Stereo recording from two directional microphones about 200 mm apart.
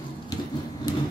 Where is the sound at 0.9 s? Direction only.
20° left (ahead or behind).